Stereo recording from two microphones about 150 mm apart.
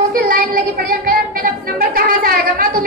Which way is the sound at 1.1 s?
75° right (ahead or behind).